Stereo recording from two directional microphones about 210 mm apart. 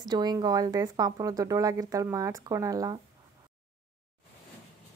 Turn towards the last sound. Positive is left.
turn(degrees=-15)  # may be behind; listen again after turning